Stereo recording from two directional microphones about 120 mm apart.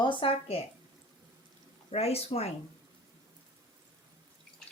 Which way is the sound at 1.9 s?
55° left (ahead or behind).